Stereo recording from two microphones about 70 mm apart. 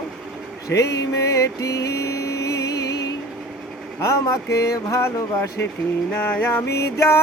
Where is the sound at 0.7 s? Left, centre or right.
Left.